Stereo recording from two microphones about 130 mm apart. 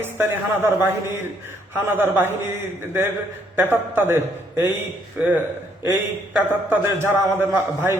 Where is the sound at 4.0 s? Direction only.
15° right (ahead or behind).